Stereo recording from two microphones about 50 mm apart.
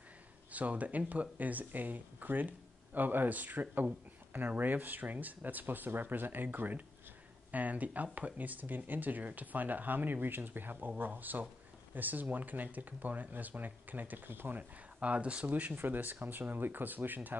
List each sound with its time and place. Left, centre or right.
0.5 s speech: right
14.6 s speech: right